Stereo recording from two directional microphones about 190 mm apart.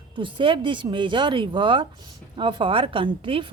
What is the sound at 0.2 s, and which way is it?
A woman's voice, 25° right (ahead or behind).